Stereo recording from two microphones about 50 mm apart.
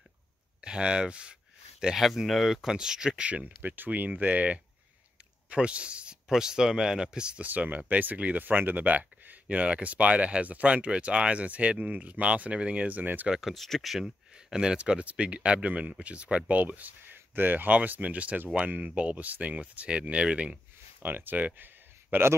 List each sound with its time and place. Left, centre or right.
0.6 s speech: centre
3.4 s speech: right; by 7.4 s centre
7.4 s speech: right
13.3 s speech: centre
14.3 s speech: centre; by 17.6 s right
17.6 s speech: right
21.0 s speech: right